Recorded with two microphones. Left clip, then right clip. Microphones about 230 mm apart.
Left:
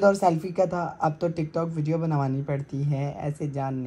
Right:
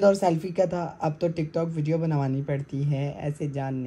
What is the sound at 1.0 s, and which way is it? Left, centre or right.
Speech, centre.